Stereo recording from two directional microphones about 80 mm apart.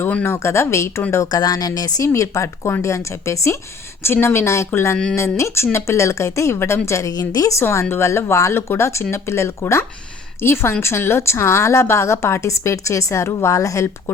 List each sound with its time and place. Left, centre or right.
0.0 s a woman's voice: left
1.3 s a woman's voice: left
7.6 s a woman's voice: left